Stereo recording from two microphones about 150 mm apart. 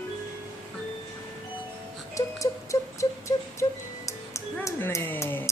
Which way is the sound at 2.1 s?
20° left (ahead or behind).